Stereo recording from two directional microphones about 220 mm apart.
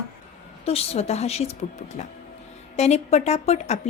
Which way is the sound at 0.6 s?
30° left (ahead or behind).